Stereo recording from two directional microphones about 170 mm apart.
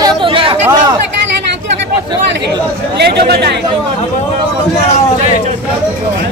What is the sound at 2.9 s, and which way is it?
Speech, 70° right (ahead or behind).